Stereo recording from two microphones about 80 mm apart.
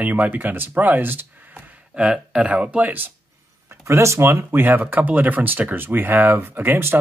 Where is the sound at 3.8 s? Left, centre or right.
Right.